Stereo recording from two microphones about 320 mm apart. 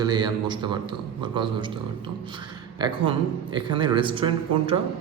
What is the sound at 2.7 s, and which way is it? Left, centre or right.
A man's voice, centre.